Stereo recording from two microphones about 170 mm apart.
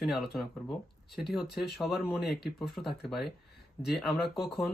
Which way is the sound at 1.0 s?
70° left (ahead or behind).